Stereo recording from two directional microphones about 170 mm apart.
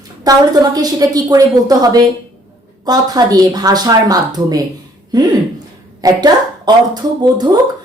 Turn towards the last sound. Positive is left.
turn(degrees=-25)  # may be behind; listen again after turning